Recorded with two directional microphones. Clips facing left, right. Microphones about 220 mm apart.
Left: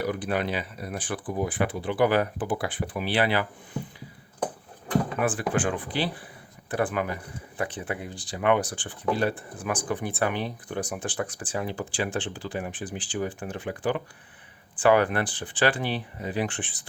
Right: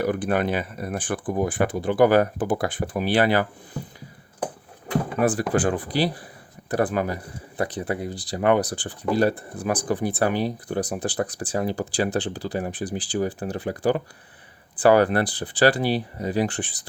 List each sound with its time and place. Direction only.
0.0 s speech: 50° right (ahead or behind)
5.2 s speech: 40° right (ahead or behind)